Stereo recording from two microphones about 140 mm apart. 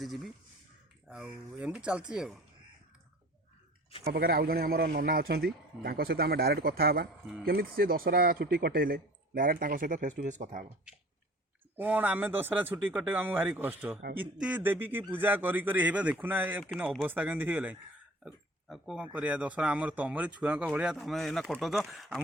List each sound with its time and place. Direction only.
0.0 s speech: centre (ahead or behind)
4.2 s speech: 90° right; by 10.7 s 65° right (ahead or behind)
11.8 s speech: 10° right (ahead or behind)